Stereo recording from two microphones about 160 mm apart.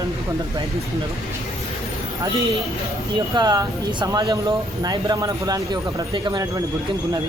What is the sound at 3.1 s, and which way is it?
Speech, 20° right (ahead or behind).